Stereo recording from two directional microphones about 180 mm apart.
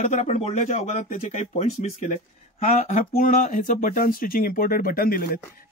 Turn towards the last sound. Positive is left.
turn(degrees=55)  # may be behind; listen again after turning